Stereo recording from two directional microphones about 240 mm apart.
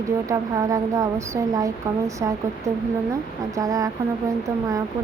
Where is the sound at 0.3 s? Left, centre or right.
Centre.